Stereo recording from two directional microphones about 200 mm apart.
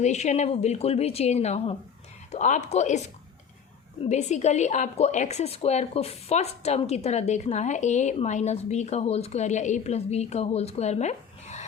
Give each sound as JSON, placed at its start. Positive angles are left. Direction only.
{"t": 0.0, "sound": "a woman's voice", "side_deg": 35}
{"t": 4.0, "sound": "a woman's voice", "side_deg": 35}